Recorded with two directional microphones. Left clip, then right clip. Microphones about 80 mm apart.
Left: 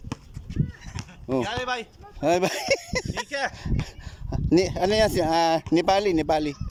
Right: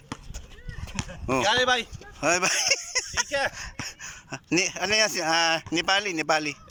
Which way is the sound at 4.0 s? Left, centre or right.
Left.